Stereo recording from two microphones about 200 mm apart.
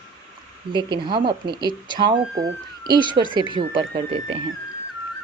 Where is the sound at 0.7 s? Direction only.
25° right (ahead or behind).